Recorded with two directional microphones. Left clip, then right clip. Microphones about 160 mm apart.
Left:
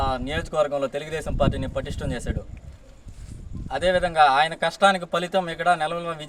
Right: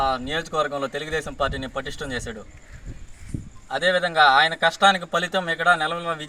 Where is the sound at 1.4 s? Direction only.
25° left (ahead or behind).